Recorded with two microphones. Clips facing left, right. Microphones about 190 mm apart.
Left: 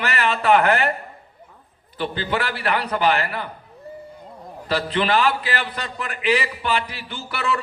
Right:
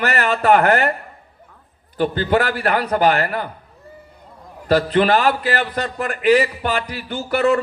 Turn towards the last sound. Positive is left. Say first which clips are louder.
# right 9 dB
turn(degrees=-45)  # may be behind; listen again after turning